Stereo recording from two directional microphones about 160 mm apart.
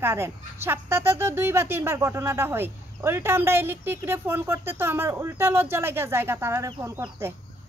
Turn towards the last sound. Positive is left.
turn(degrees=-20)  # may be behind; listen again after turning